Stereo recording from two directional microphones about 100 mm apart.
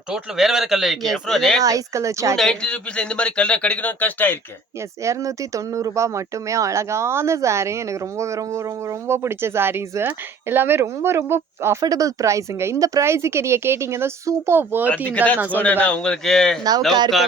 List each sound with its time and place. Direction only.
0.1 s speech: 5° right (ahead or behind)
1.6 s speech: 35° right (ahead or behind)
2.3 s a man's voice: 5° left (ahead or behind)
5.0 s speech: 35° right (ahead or behind)
11.8 s speech: 35° right (ahead or behind); by 14.8 s 20° right (ahead or behind)
14.8 s a man's voice: 15° left (ahead or behind)
15.4 s a man's voice: 15° right (ahead or behind)
15.6 s a man's voice: 15° left (ahead or behind)